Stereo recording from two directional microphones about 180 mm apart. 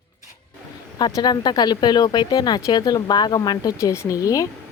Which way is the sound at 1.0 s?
25° left (ahead or behind).